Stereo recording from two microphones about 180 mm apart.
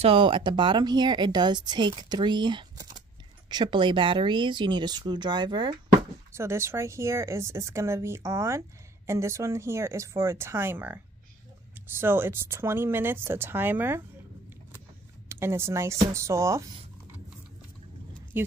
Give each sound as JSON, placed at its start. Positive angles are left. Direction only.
{"t": 0.0, "sound": "speech", "side_deg": -30}
{"t": 6.3, "sound": "a woman's voice", "side_deg": -15}
{"t": 12.0, "sound": "a woman's voice", "side_deg": -10}
{"t": 15.2, "sound": "a woman's voice", "side_deg": -15}
{"t": 18.3, "sound": "a woman's voice", "side_deg": -10}